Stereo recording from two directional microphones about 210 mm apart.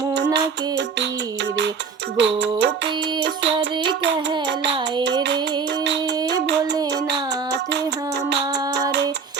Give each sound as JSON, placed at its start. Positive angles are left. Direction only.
{"t": 0.3, "sound": "child singing", "side_deg": -55}
{"t": 2.1, "sound": "music", "side_deg": -60}
{"t": 3.2, "sound": "child singing", "side_deg": -60}
{"t": 6.9, "sound": "a sound", "side_deg": -55}